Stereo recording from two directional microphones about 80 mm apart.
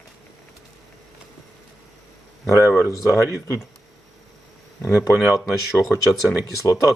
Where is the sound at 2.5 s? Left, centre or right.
Left.